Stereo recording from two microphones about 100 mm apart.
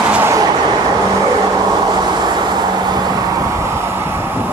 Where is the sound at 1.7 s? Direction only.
45° right (ahead or behind).